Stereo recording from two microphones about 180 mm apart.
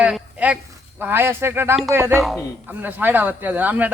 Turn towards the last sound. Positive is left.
turn(degrees=-10)  # may be behind; listen again after turning